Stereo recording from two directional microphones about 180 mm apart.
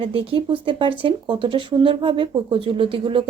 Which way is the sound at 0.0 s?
30° right (ahead or behind).